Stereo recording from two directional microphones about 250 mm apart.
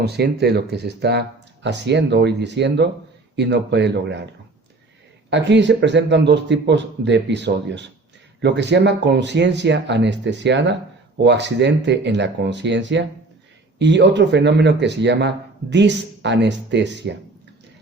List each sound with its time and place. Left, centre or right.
0.0 s speech: right
5.3 s speech: right